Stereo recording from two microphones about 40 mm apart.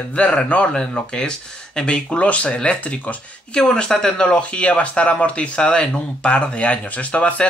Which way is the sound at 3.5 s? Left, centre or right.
Left.